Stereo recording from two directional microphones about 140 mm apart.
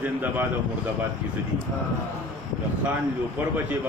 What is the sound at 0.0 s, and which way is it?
Speech, 15° right (ahead or behind).